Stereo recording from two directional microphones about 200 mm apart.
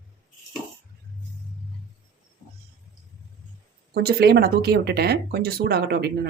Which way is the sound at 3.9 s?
50° right (ahead or behind).